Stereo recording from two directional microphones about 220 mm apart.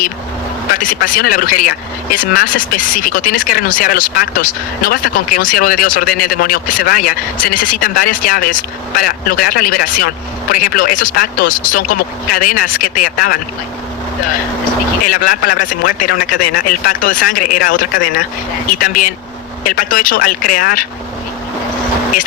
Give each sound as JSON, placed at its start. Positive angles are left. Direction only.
{"t": 0.7, "sound": "speech", "side_deg": 40}
{"t": 15.0, "sound": "speech", "side_deg": 40}